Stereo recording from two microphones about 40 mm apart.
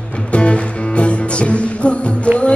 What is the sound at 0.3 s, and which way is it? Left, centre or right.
Music, left.